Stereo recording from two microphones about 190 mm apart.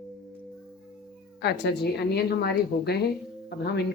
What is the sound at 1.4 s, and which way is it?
A woman's voice, 60° left (ahead or behind).